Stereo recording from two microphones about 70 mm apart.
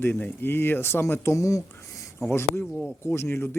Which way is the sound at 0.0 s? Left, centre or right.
Left.